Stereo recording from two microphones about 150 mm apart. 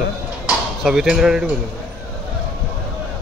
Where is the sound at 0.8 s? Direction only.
5° right (ahead or behind).